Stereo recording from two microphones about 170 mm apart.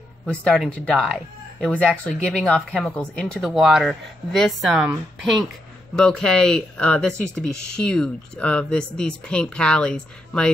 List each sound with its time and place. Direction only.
0.3 s speech: 5° left (ahead or behind)